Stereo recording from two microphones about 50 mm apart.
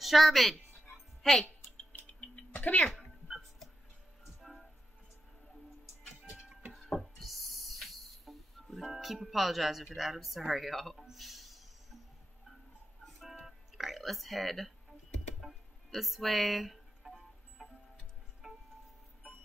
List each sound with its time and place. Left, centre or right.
0.0 s speech: centre
1.2 s music: centre
2.0 s music: left
2.6 s speech: left
4.4 s music: centre
6.8 s music: centre
13.0 s music: centre